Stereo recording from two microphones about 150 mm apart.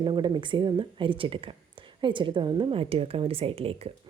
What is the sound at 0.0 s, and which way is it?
A woman's voice, 30° right (ahead or behind).